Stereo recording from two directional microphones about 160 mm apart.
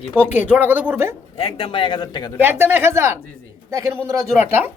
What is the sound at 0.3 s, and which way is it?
Speech, 10° right (ahead or behind).